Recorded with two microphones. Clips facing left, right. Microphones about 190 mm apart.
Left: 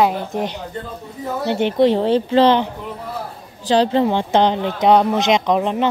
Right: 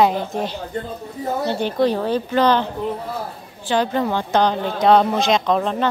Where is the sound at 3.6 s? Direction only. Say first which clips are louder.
Left 4 dB; 30° left (ahead or behind).